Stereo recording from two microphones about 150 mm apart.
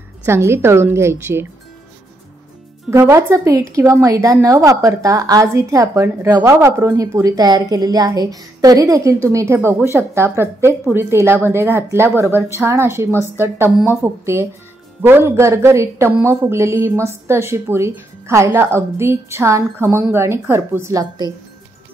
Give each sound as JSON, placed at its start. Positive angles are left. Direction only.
{"t": 0.2, "sound": "speech", "side_deg": -15}
{"t": 2.9, "sound": "speech", "side_deg": -20}